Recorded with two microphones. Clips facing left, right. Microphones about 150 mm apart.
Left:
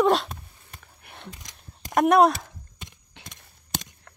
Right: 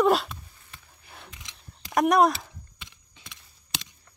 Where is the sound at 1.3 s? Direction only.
45° left (ahead or behind).